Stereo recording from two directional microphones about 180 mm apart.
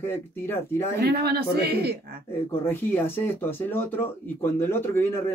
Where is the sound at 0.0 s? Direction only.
15° left (ahead or behind).